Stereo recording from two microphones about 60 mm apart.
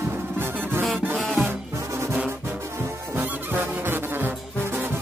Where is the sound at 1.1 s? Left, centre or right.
Centre.